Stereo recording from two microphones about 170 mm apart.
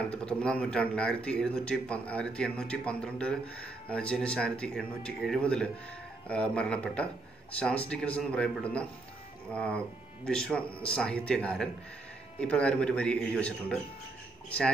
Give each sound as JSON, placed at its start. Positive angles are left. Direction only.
{"t": 0.1, "sound": "speech", "side_deg": 5}